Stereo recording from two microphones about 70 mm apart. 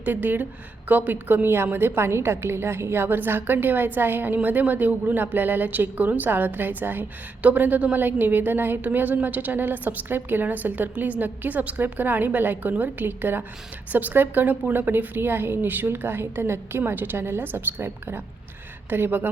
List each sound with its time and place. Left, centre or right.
0.0 s a woman's voice: right